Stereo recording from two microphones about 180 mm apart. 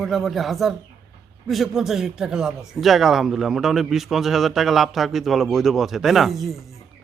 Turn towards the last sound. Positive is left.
turn(degrees=0)  # may be behind; listen again after turning